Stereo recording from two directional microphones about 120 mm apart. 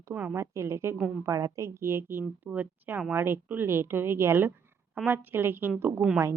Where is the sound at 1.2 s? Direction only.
25° right (ahead or behind).